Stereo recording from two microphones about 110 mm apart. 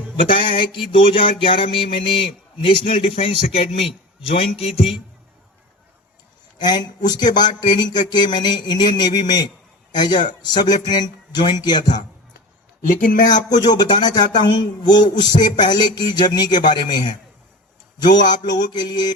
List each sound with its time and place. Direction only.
0.2 s a sound: 50° left (ahead or behind)
2.6 s a man's voice: 60° left (ahead or behind)
6.6 s speech: 40° left (ahead or behind)
13.7 s speech: 40° left (ahead or behind)